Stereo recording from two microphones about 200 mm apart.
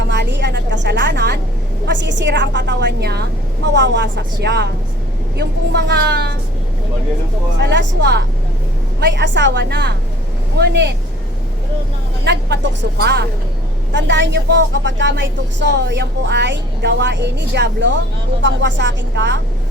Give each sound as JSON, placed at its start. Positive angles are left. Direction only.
{"t": 0.1, "sound": "a sound", "side_deg": -60}
{"t": 1.9, "sound": "a woman's voice", "side_deg": -65}
{"t": 7.6, "sound": "a woman's voice", "side_deg": -60}
{"t": 12.2, "sound": "a woman's voice", "side_deg": -60}